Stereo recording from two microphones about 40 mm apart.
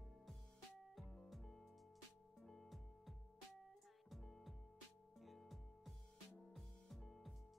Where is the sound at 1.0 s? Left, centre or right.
Left.